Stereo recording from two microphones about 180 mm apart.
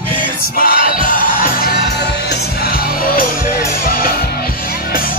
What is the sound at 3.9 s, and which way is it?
Music, 55° left (ahead or behind).